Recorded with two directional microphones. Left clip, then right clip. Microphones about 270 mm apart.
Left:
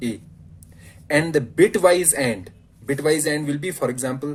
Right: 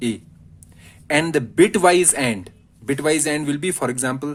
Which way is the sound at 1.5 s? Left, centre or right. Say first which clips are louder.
Right 1 dB; right.